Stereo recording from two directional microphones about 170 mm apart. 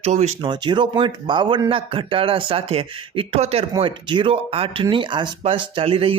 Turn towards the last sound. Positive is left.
turn(degrees=-35)  # may be behind; listen again after turning